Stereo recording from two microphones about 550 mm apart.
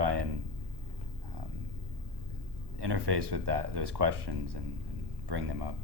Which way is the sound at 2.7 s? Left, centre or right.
Right.